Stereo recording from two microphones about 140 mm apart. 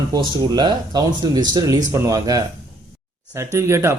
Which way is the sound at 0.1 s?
30° right (ahead or behind).